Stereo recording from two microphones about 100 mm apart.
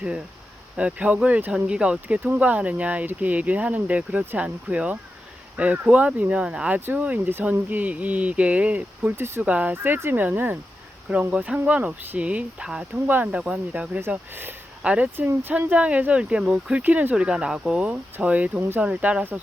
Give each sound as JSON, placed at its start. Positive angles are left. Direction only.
{"t": 0.8, "sound": "speech", "side_deg": -10}
{"t": 9.5, "sound": "speech", "side_deg": -15}